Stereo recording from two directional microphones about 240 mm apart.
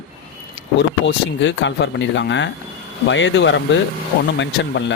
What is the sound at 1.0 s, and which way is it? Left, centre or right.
Speech, left.